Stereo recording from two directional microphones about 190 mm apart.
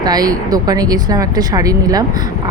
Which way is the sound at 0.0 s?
20° right (ahead or behind).